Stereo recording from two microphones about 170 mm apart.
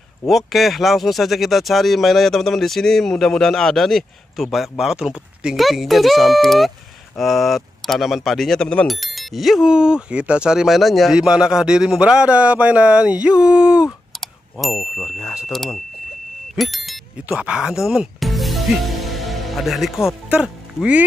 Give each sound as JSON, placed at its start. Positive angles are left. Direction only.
{"t": 0.3, "sound": "speech", "side_deg": 0}